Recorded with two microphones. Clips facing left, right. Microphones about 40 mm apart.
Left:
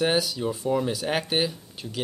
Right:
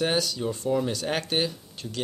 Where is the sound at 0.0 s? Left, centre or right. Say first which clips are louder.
Left 2 dB; centre.